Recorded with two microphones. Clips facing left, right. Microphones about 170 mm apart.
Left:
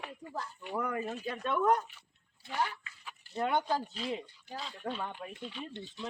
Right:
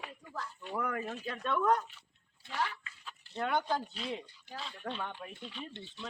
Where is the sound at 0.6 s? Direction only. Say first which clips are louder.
Left 1 dB; 10° left (ahead or behind).